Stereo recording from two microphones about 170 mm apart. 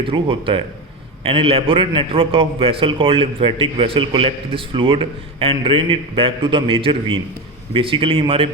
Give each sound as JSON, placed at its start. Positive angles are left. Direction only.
{"t": 0.0, "sound": "a man's voice", "side_deg": -30}